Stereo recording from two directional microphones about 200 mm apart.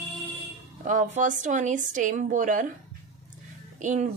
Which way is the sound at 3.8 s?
40° right (ahead or behind).